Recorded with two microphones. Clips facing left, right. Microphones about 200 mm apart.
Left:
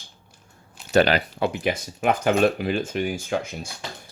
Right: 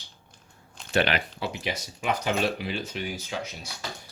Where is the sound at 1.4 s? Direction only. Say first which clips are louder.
Left 8 dB; 50° left (ahead or behind).